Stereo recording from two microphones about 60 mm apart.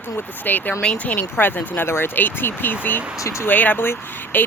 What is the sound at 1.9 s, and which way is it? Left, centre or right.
Speech, left.